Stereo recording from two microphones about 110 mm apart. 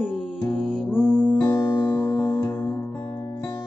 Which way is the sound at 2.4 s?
25° left (ahead or behind).